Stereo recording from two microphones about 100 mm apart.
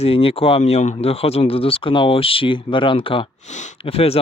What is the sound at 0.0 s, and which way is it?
Speech, 70° left (ahead or behind).